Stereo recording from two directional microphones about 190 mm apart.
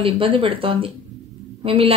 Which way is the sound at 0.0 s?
30° right (ahead or behind).